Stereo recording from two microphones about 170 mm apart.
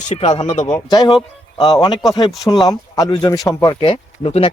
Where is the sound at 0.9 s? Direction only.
25° left (ahead or behind).